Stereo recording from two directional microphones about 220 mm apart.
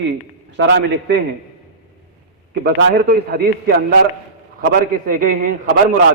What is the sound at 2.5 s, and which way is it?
A man's voice, 45° right (ahead or behind).